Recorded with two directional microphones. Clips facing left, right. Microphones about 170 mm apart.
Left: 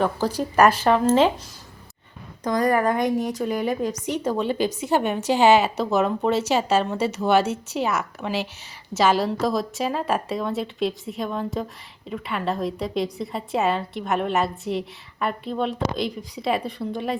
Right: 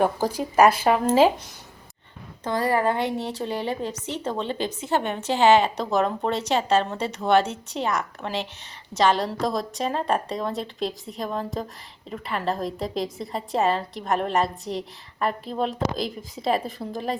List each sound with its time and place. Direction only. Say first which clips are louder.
0.0 s speech: even; 10° right (ahead or behind)
2.4 s a woman's voice: left 2 dB; 25° right (ahead or behind)
4.0 s a woman's voice: left 4 dB; 10° left (ahead or behind)